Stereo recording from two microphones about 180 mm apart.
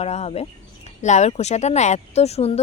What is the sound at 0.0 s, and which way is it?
Speech, 35° left (ahead or behind).